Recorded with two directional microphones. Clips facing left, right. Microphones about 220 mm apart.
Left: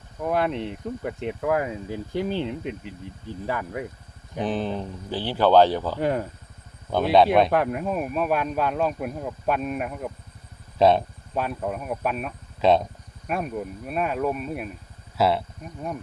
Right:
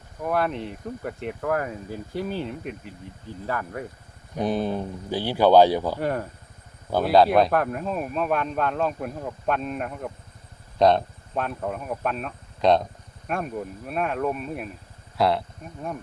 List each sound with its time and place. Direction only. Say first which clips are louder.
0.3 s speech: left 1 dB; 20° left (ahead or behind)
2.1 s speech: left 3 dB; 25° left (ahead or behind)
4.4 s speech: right 2 dB; 10° right (ahead or behind)
6.0 s speech: left 2 dB; 15° left (ahead or behind)
6.9 s speech: even; centre (ahead or behind)
7.5 s speech: left 1 dB; 10° left (ahead or behind)